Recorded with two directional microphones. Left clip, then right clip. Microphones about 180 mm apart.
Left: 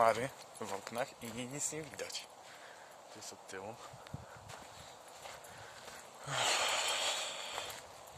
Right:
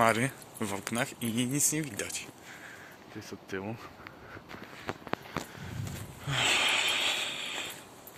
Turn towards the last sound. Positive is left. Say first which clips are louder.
# right 7 dB
turn(degrees=20)  # may be behind; listen again after turning